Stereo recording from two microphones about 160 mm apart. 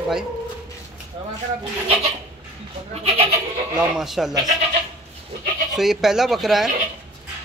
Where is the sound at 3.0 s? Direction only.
40° right (ahead or behind).